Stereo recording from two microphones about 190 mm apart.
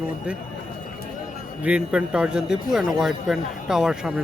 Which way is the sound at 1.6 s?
5° right (ahead or behind).